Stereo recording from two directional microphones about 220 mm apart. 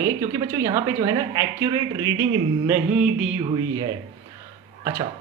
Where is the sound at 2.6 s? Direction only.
5° right (ahead or behind).